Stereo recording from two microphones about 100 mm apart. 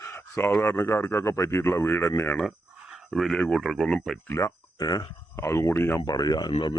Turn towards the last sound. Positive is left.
turn(degrees=40)  # may be behind; listen again after turning